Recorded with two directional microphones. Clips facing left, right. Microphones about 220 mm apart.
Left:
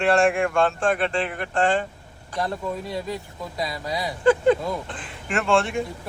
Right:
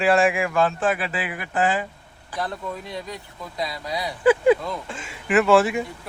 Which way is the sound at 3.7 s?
25° left (ahead or behind).